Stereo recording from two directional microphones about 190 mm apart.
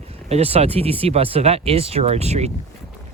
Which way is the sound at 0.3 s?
35° right (ahead or behind).